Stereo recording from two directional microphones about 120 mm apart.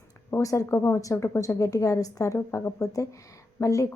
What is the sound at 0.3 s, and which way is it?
A woman's voice, 25° left (ahead or behind).